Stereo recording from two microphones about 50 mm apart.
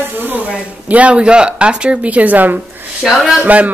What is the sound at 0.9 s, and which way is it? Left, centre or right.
Speech, right.